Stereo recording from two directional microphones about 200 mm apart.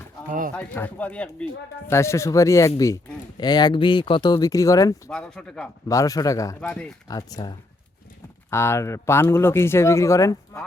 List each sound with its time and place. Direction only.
0.3 s speech: 45° right (ahead or behind)
0.5 s speech: 5° left (ahead or behind)
5.1 s speech: 5° left (ahead or behind)
5.9 s speech: 15° left (ahead or behind)
6.6 s speech: 5° left (ahead or behind)
7.1 s speech: 20° left (ahead or behind)